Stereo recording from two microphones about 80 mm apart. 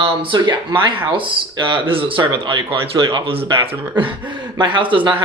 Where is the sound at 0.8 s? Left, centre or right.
Right.